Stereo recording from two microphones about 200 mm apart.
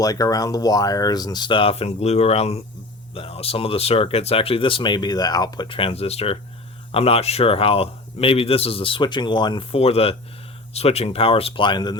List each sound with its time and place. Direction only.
0.0 s speech: 15° left (ahead or behind)